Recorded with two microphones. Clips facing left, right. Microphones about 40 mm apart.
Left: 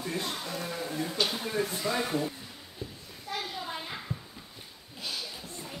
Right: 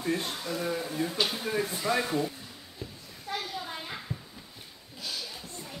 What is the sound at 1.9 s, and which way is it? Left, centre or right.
Speech, right.